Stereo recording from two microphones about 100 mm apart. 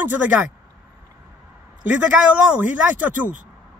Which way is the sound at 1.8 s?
15° right (ahead or behind).